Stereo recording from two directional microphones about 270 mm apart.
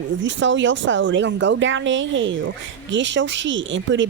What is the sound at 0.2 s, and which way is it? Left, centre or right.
A woman's voice, right.